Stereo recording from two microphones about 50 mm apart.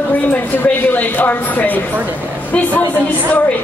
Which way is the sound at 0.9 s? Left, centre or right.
Left.